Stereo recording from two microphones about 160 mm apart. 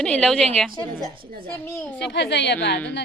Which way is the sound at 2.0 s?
90° left.